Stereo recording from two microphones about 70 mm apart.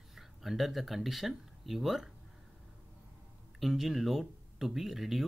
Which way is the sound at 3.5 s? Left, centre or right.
Centre.